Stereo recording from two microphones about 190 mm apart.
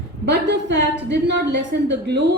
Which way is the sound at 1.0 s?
65° right (ahead or behind).